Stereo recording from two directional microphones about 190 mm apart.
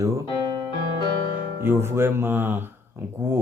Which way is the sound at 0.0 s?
15° right (ahead or behind).